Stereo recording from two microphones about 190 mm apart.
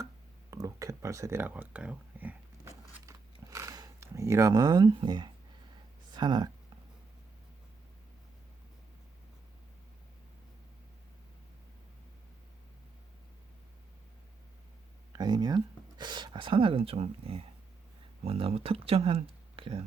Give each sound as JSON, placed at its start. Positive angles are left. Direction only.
{"t": 0.5, "sound": "a sound", "side_deg": -15}
{"t": 6.1, "sound": "speech", "side_deg": -20}
{"t": 15.1, "sound": "speech", "side_deg": -20}